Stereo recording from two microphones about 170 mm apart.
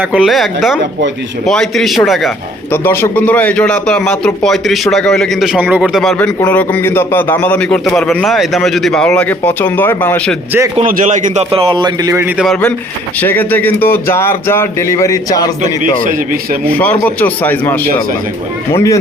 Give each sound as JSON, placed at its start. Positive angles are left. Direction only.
{"t": 0.0, "sound": "a man's voice", "side_deg": -5}
{"t": 2.7, "sound": "a man's voice", "side_deg": 15}
{"t": 10.8, "sound": "a man's voice", "side_deg": -50}
{"t": 11.5, "sound": "speech", "side_deg": -30}
{"t": 12.1, "sound": "a man's voice", "side_deg": -10}
{"t": 13.1, "sound": "a man's voice", "side_deg": 10}
{"t": 16.0, "sound": "speech", "side_deg": -55}
{"t": 16.7, "sound": "a man's voice", "side_deg": 10}